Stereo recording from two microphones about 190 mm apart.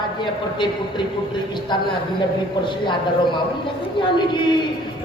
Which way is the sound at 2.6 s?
25° left (ahead or behind).